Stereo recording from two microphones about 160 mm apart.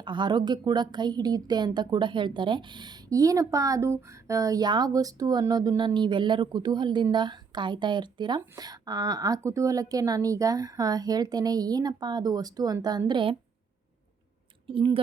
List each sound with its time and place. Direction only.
0.0 s a woman's voice: 30° right (ahead or behind)
14.7 s speech: 30° right (ahead or behind)